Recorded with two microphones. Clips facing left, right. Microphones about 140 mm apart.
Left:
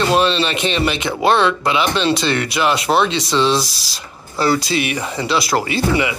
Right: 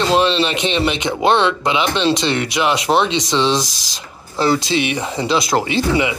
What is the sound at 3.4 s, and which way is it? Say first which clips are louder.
Speech: left 1 dB; 10° left (ahead or behind).